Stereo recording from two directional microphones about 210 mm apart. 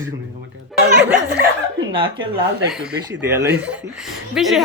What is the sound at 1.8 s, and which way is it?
Speech, 25° right (ahead or behind).